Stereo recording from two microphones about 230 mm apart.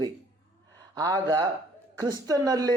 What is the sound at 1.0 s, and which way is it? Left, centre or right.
Speech, centre.